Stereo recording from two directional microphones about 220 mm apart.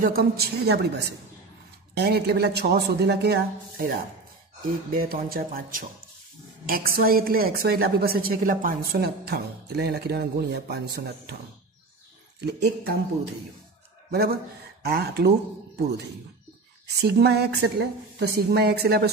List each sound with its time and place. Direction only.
0.0 s a woman's voice: 45° right (ahead or behind)
12.4 s a woman's voice: 50° right (ahead or behind)
16.8 s a woman's voice: 50° right (ahead or behind)